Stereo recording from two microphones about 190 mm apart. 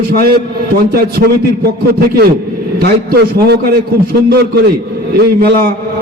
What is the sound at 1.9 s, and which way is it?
A man's voice, 55° right (ahead or behind).